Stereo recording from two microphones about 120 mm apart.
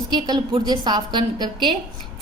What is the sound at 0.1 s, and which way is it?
A woman's voice, 35° right (ahead or behind).